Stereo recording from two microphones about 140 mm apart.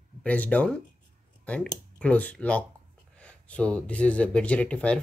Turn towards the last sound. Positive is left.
turn(degrees=10)  # may be behind; listen again after turning